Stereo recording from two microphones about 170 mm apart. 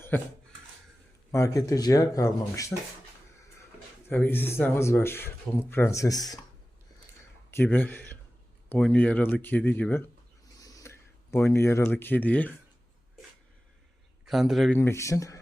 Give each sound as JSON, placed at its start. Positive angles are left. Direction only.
{"t": 0.1, "sound": "speech", "side_deg": 10}
{"t": 1.3, "sound": "speech", "side_deg": 20}
{"t": 4.1, "sound": "speech", "side_deg": 10}
{"t": 7.5, "sound": "speech", "side_deg": 10}
{"t": 10.6, "sound": "speech", "side_deg": 20}
{"t": 14.3, "sound": "speech", "side_deg": 0}
{"t": 14.7, "sound": "speech", "side_deg": 15}